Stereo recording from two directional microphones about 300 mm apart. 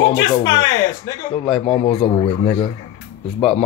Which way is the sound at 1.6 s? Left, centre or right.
Left.